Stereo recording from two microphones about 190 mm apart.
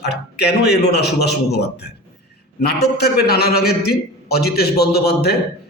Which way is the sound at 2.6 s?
60° left (ahead or behind).